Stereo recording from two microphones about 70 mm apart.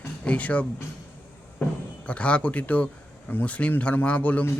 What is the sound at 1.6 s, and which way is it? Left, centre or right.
Music, left.